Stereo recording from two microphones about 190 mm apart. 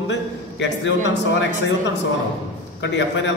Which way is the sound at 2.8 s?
70° left (ahead or behind).